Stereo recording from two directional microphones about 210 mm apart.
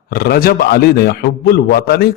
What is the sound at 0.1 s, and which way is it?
A man's voice, 45° left (ahead or behind).